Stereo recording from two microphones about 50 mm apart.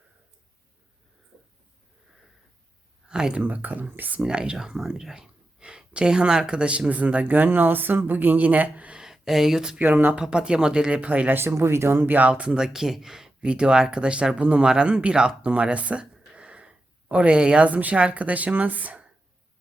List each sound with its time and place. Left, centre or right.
3.1 s speech: centre
3.4 s speech: right
4.2 s speech: centre
9.0 s speech: centre
9.7 s speech: right
10.2 s speech: centre
11.3 s speech: right
12.3 s speech: centre
15.4 s a sound: right
17.7 s speech: right